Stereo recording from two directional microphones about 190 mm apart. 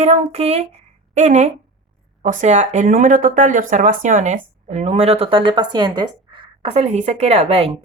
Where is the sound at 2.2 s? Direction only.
40° right (ahead or behind).